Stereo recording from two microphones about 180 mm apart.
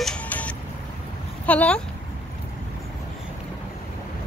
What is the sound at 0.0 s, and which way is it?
Vehicle, 5° left (ahead or behind).